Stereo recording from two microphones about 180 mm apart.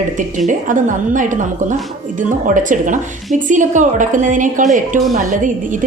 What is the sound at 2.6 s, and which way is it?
A woman's voice, 45° right (ahead or behind).